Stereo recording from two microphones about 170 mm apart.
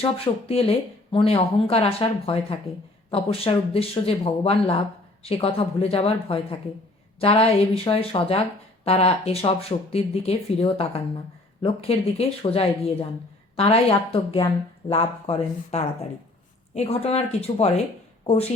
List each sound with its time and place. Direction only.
0.0 s speech: 35° left (ahead or behind)